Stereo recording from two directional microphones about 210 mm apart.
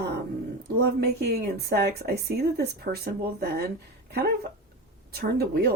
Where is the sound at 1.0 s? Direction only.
50° right (ahead or behind).